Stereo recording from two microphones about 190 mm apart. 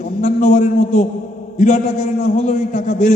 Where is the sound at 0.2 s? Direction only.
40° left (ahead or behind).